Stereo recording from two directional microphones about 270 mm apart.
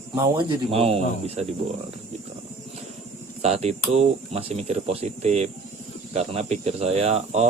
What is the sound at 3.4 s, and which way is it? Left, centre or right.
Speech, right.